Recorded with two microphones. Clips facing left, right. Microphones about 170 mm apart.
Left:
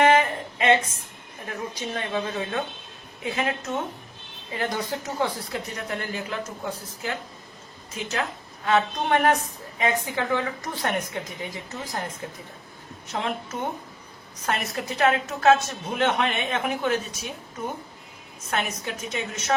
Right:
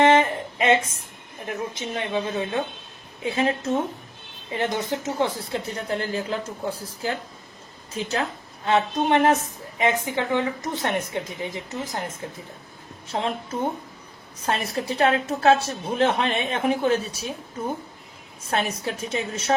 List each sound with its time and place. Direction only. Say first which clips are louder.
0.0 s a sound: right 2 dB; 25° right (ahead or behind)
1.5 s a woman's voice: right 2 dB; 20° right (ahead or behind)
3.2 s a woman's voice: right 4 dB; 30° right (ahead or behind)
18.5 s a woman's voice: right 3 dB; 30° right (ahead or behind)